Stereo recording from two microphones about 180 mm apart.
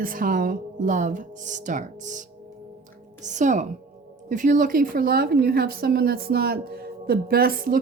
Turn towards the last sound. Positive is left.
turn(degrees=-55)  # may be behind; listen again after turning